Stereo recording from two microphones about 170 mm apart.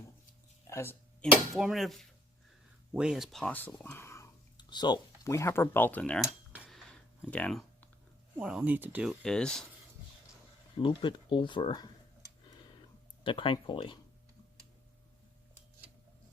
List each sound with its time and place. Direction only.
0.7 s a sound: 15° left (ahead or behind)
1.5 s speech: centre (ahead or behind); by 4.3 s 15° left (ahead or behind)
4.5 s speech: 25° left (ahead or behind); by 6.2 s 5° left (ahead or behind)
6.5 s cutlery: 5° right (ahead or behind)
8.4 s speech: 5° right (ahead or behind)
9.2 s speech: 5° left (ahead or behind)
10.8 s speech: 30° left (ahead or behind)
13.2 s speech: 30° left (ahead or behind)